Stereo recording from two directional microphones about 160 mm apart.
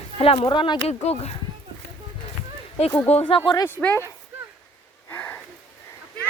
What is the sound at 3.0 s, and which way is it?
Speech, 35° left (ahead or behind).